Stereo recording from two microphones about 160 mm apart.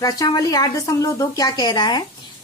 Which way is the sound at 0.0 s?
20° left (ahead or behind).